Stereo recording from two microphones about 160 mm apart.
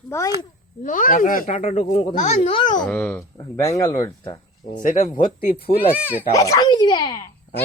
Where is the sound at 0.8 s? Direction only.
55° left (ahead or behind).